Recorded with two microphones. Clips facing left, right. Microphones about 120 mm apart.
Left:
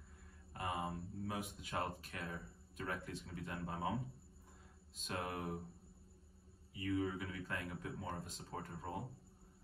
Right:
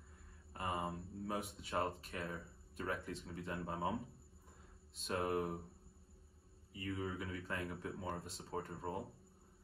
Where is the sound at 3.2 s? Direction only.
25° right (ahead or behind).